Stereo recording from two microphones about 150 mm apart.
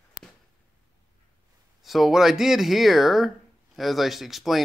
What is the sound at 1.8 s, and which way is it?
Speech, centre (ahead or behind).